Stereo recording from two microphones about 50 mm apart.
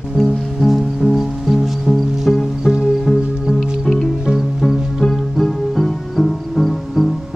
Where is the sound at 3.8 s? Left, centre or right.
Centre.